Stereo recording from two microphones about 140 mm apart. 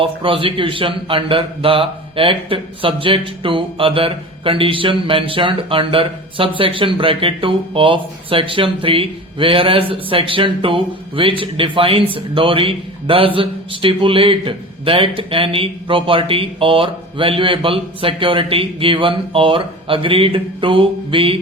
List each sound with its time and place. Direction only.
0.0 s a man's voice: 40° right (ahead or behind)